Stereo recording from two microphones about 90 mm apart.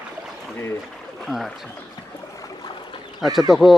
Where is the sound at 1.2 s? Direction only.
Centre (ahead or behind).